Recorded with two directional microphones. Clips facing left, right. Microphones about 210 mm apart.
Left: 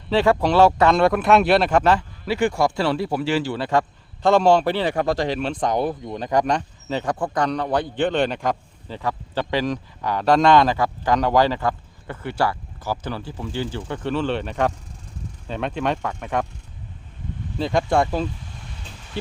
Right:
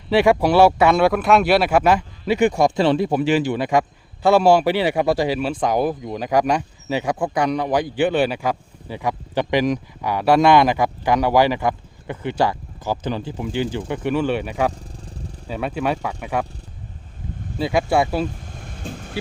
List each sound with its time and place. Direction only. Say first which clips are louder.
0.1 s speech: right 3 dB; 10° right (ahead or behind)
17.6 s speech: right 1 dB; 10° right (ahead or behind)
18.5 s vehicle: right 8 dB; 50° right (ahead or behind)